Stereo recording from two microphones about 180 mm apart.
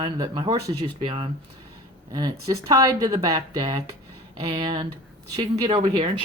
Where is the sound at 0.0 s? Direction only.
25° right (ahead or behind).